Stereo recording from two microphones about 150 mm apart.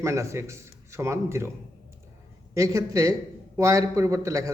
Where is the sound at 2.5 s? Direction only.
20° right (ahead or behind).